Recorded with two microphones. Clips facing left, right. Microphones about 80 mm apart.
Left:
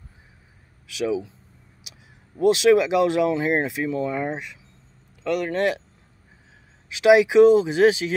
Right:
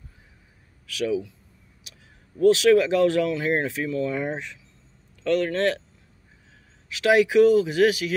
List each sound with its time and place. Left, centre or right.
0.8 s speech: centre
2.4 s speech: centre
4.3 s speech: centre
6.9 s speech: centre